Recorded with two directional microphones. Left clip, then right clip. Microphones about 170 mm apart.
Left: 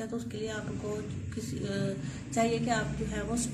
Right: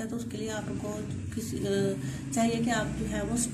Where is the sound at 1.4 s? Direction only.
25° left (ahead or behind).